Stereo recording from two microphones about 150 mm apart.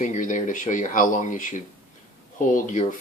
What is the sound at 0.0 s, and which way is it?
Speech, 55° left (ahead or behind).